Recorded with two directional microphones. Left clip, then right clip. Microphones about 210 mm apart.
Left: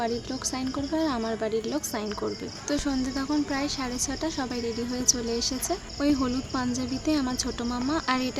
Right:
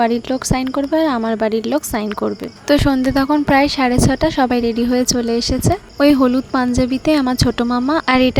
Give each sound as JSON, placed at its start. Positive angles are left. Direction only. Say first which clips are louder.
{"t": 0.0, "sound": "speech", "louder": "right 13 dB", "side_deg": -40}